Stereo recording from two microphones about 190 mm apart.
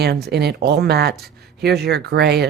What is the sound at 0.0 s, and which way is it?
Speech, 60° right (ahead or behind).